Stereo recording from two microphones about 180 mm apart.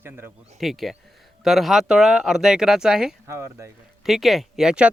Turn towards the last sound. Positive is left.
turn(degrees=-5)  # may be behind; listen again after turning